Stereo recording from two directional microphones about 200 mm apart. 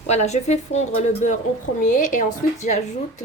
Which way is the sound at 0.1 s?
35° left (ahead or behind).